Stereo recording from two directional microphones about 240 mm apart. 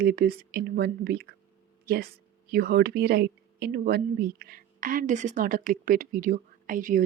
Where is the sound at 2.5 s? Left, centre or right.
Right.